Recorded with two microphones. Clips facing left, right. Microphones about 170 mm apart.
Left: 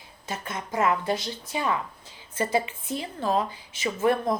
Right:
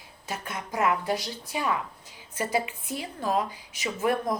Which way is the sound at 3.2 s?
25° left (ahead or behind).